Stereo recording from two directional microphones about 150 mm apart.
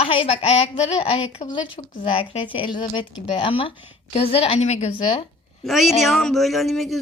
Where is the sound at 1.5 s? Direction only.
30° left (ahead or behind).